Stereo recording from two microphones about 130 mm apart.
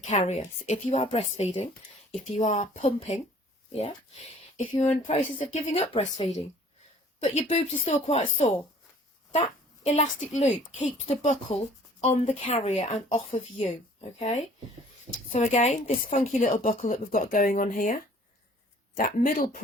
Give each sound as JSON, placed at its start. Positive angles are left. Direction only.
{"t": 0.0, "sound": "a woman's voice", "side_deg": 65}
{"t": 2.4, "sound": "a woman's voice", "side_deg": 70}
{"t": 7.4, "sound": "a woman's voice", "side_deg": 55}
{"t": 9.3, "sound": "a woman's voice", "side_deg": 55}
{"t": 14.2, "sound": "a woman's voice", "side_deg": 65}